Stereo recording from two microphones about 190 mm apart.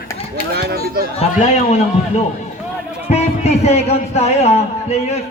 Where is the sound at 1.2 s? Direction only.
35° left (ahead or behind).